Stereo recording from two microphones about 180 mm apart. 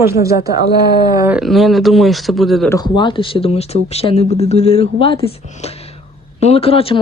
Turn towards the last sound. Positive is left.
turn(degrees=30)  # may be behind; listen again after turning